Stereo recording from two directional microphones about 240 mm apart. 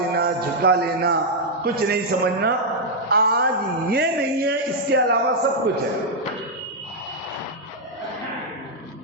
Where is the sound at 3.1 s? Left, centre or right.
Right.